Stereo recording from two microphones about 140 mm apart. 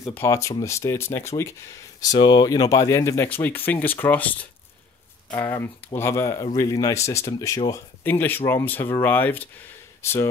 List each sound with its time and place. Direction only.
0.0 s speech: 20° left (ahead or behind)